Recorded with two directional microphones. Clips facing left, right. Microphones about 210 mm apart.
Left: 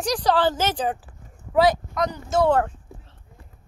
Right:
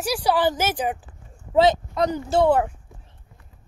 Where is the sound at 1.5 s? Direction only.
25° right (ahead or behind).